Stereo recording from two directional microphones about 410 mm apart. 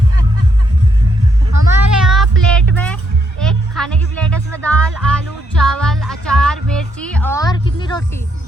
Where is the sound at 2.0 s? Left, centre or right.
Centre.